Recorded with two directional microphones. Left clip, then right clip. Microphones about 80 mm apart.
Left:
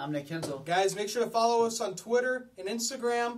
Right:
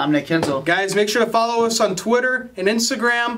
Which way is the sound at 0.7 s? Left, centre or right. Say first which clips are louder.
Right 7 dB; left.